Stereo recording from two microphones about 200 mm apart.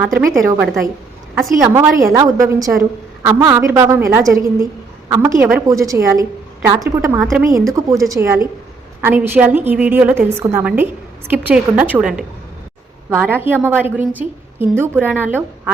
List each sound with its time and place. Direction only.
0.4 s a woman's voice: 15° right (ahead or behind)